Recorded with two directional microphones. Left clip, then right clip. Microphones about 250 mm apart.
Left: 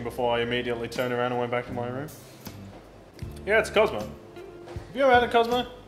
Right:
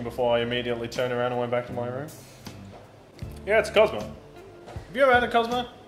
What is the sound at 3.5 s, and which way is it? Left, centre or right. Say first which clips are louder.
Speech: right 2 dB; centre.